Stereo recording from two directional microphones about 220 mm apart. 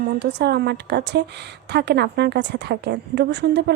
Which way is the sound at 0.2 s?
50° right (ahead or behind).